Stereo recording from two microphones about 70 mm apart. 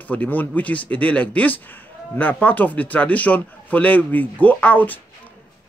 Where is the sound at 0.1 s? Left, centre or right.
Left.